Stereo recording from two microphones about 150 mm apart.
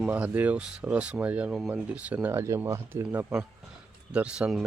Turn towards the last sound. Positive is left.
turn(degrees=-5)  # may be behind; listen again after turning